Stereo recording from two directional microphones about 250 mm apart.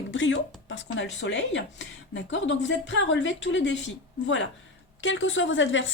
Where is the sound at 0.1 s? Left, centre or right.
Left.